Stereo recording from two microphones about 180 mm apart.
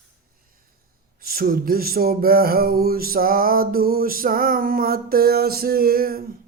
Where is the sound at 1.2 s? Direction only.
55° right (ahead or behind).